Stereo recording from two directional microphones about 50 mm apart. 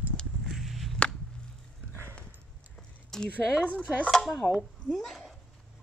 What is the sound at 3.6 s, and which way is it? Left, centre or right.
Dishes, left.